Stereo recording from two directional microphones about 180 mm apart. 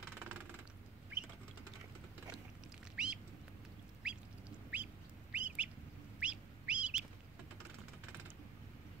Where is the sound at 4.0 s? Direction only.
5° right (ahead or behind).